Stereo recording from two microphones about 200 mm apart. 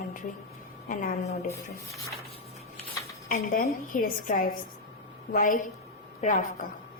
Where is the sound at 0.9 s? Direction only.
40° left (ahead or behind).